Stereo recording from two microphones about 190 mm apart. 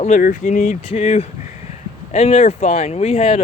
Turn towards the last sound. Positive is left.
turn(degrees=30)  # may be behind; listen again after turning